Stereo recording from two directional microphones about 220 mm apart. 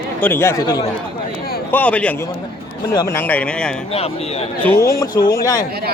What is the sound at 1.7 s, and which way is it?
Speech, 5° left (ahead or behind).